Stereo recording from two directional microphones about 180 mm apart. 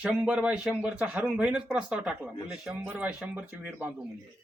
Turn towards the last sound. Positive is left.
turn(degrees=-10)  # may be behind; listen again after turning